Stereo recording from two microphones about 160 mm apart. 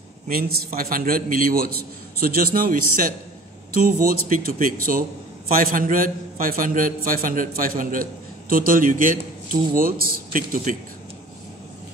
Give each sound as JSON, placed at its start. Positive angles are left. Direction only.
{"t": 0.3, "sound": "a man's voice", "side_deg": -65}